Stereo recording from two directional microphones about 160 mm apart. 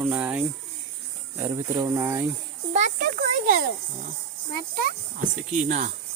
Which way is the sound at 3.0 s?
70° right (ahead or behind).